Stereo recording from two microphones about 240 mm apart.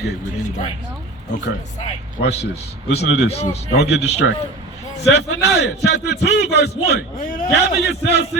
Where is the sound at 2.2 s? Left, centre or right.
Left.